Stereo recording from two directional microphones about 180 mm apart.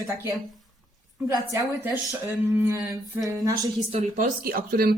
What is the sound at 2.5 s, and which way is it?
A woman's voice, 15° right (ahead or behind).